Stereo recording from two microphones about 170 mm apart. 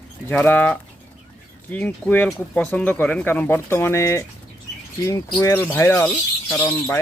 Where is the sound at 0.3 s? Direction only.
10° left (ahead or behind).